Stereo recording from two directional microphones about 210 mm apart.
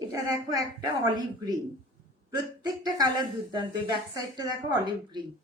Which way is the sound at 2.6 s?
20° right (ahead or behind).